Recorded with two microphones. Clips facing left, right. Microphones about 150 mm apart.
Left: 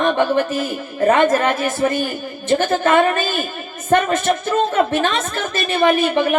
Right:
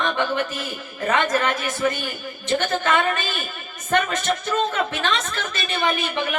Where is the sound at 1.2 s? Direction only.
30° left (ahead or behind).